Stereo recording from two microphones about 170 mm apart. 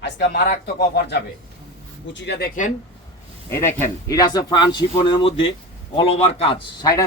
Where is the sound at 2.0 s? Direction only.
90° left.